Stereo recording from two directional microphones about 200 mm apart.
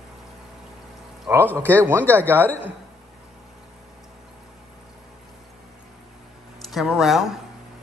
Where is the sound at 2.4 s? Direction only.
10° left (ahead or behind).